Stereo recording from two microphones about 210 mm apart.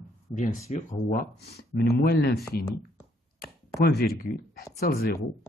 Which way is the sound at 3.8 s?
50° left (ahead or behind).